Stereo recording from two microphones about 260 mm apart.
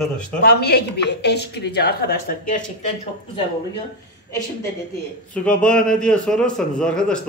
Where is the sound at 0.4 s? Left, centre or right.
Left.